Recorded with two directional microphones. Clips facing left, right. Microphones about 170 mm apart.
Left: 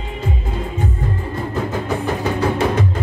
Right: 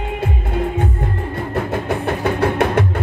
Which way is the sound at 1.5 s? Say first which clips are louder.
Right 2 dB; 60° right (ahead or behind).